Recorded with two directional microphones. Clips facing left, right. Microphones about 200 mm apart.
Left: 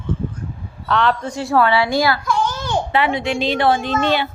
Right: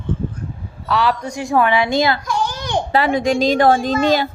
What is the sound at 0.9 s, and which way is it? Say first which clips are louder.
A woman's voice: even; 5° right (ahead or behind).